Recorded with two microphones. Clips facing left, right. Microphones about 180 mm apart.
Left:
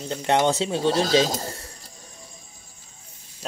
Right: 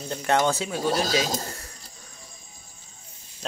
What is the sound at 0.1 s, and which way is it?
Speech, 20° left (ahead or behind).